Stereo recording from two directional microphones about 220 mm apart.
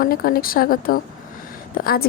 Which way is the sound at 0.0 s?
40° left (ahead or behind).